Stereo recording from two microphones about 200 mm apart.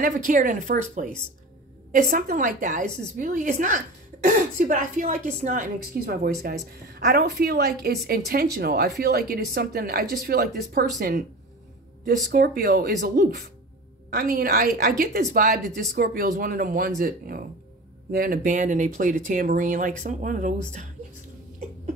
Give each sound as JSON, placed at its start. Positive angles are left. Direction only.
{"t": 0.0, "sound": "a woman's voice", "side_deg": -40}
{"t": 2.0, "sound": "a woman's voice", "side_deg": -45}
{"t": 12.3, "sound": "a woman's voice", "side_deg": -50}